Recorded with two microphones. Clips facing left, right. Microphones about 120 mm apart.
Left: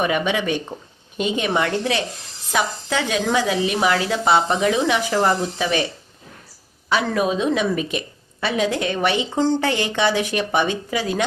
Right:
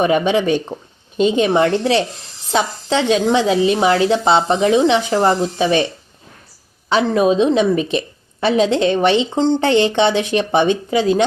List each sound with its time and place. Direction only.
0.0 s a woman's voice: 30° right (ahead or behind)
6.9 s a woman's voice: 25° right (ahead or behind)